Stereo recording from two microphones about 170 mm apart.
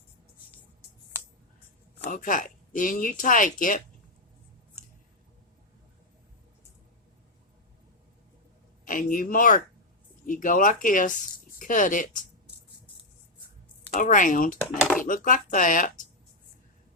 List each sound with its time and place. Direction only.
2.0 s speech: 50° left (ahead or behind)
8.8 s speech: 55° left (ahead or behind)
13.9 s speech: 50° left (ahead or behind)